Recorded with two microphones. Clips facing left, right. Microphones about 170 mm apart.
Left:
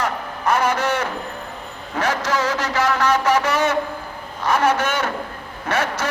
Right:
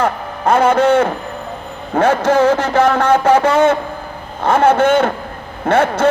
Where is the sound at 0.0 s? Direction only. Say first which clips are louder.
Right 6 dB; 55° right (ahead or behind).